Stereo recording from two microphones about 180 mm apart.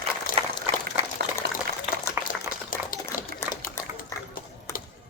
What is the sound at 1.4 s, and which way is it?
Liquid, 70° right (ahead or behind).